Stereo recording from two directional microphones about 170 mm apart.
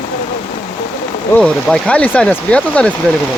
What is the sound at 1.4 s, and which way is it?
Speech, 5° left (ahead or behind).